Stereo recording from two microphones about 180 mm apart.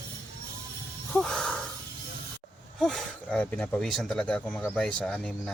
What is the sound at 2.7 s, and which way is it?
Speech, centre (ahead or behind).